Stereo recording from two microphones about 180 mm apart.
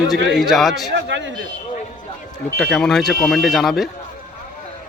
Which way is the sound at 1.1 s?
90° right.